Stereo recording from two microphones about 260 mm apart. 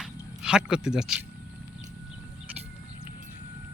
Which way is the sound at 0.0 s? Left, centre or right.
Centre.